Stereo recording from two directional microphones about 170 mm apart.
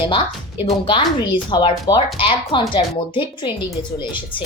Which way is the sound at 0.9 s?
30° left (ahead or behind).